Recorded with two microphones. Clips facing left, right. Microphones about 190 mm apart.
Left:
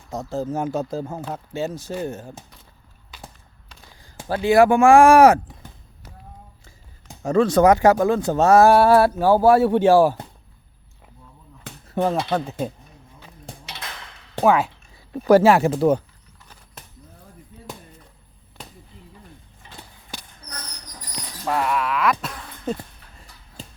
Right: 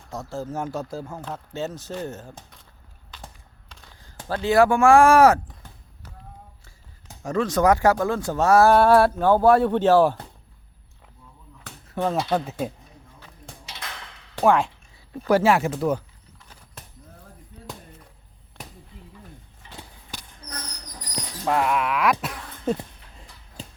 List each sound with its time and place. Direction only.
0.1 s speech: 20° left (ahead or behind)
1.3 s speech: 10° left (ahead or behind)
3.1 s a sound: 10° left (ahead or behind)
7.3 s speech: 30° left (ahead or behind)
8.7 s speech: 5° left (ahead or behind)
12.0 s speech: 5° right (ahead or behind)
14.4 s speech: 5° left (ahead or behind)
15.3 s speech: 40° left (ahead or behind)
21.5 s speech: 10° right (ahead or behind)